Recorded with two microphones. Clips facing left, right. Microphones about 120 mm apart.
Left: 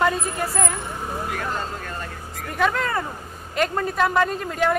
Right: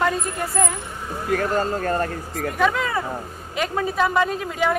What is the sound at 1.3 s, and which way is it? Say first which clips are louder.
Speech: right 7 dB; 45° right (ahead or behind).